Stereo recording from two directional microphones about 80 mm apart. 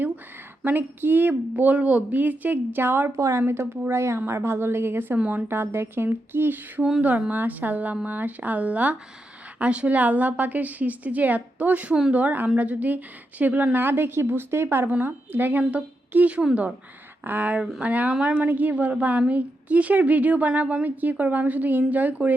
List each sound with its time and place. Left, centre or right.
0.6 s a woman's voice: right
3.2 s speech: right
3.4 s a woman's voice: right
5.5 s a woman's voice: right